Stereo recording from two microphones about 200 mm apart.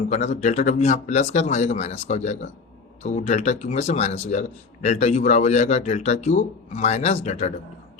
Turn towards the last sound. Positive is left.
turn(degrees=35)  # may be behind; listen again after turning